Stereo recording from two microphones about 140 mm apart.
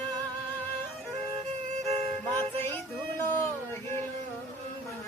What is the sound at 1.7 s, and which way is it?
Music, 50° right (ahead or behind).